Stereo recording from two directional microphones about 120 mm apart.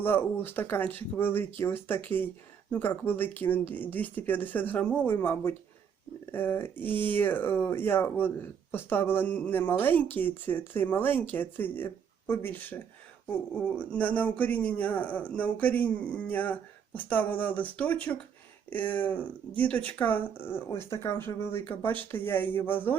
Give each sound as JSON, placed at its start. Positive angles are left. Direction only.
{"t": 0.0, "sound": "a man's voice", "side_deg": 15}